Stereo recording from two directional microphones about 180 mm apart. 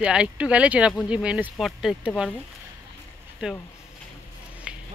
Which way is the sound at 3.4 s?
5° right (ahead or behind).